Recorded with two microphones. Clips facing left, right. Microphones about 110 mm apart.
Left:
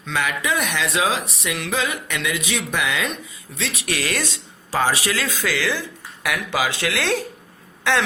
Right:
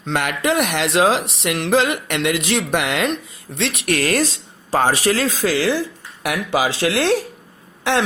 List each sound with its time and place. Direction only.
0.1 s speech: 65° right (ahead or behind); by 7.2 s 25° right (ahead or behind)